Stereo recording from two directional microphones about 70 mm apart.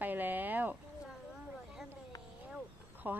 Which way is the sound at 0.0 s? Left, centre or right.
Right.